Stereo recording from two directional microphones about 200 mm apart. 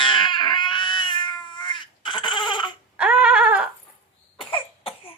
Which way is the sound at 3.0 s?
5° right (ahead or behind).